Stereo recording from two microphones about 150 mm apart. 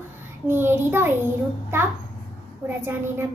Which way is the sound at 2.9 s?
15° right (ahead or behind).